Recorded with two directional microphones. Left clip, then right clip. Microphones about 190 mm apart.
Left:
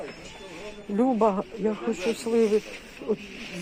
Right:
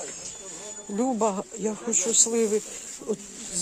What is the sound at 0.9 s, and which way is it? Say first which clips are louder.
Speech: left 3 dB; 15° right (ahead or behind).